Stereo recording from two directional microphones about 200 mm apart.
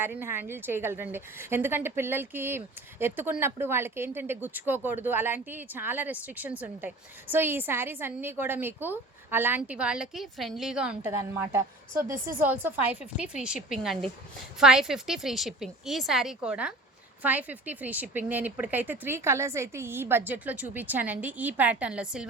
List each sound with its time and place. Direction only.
0.0 s a woman's voice: 10° right (ahead or behind)
12.1 s speech: 45° right (ahead or behind)
12.4 s a woman's voice: 10° right (ahead or behind)